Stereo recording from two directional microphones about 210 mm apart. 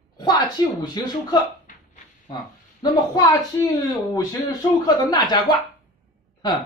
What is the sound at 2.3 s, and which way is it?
A woman's voice, 20° left (ahead or behind).